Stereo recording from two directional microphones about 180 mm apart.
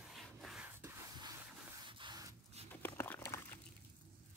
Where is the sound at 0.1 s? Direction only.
Centre (ahead or behind).